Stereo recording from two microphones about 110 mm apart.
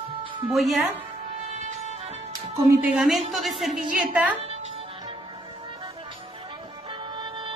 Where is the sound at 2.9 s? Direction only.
5° right (ahead or behind).